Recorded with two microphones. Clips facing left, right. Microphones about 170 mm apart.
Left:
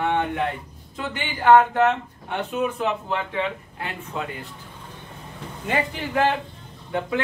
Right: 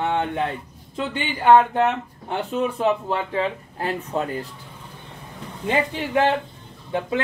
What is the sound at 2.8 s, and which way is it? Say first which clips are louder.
Speech: right 4 dB; 35° right (ahead or behind).